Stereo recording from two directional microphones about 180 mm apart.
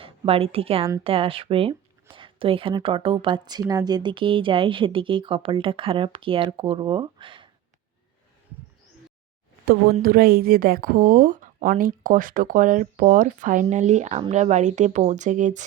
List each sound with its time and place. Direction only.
0.0 s a woman's voice: 30° right (ahead or behind)
10.0 s speech: 55° right (ahead or behind)